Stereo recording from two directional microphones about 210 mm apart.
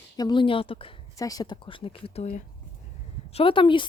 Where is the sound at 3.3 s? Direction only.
25° left (ahead or behind).